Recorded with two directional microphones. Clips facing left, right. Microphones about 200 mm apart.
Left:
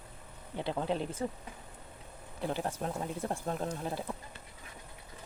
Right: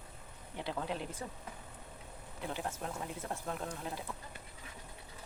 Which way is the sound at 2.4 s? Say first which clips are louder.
Left 5 dB; 35° left (ahead or behind).